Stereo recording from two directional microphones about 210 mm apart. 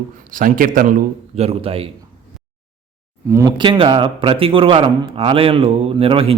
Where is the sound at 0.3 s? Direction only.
40° right (ahead or behind).